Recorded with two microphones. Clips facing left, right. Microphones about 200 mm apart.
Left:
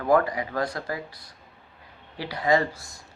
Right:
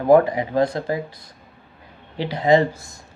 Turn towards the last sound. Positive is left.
turn(degrees=-25)  # may be behind; listen again after turning